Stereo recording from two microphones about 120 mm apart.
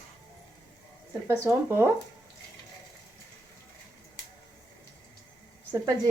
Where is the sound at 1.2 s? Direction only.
20° right (ahead or behind).